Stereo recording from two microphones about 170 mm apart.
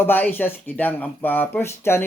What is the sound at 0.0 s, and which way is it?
Speech, 10° left (ahead or behind).